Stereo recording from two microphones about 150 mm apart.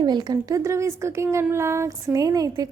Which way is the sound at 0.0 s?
30° right (ahead or behind).